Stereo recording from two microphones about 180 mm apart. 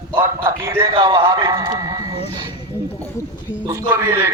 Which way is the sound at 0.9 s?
30° right (ahead or behind).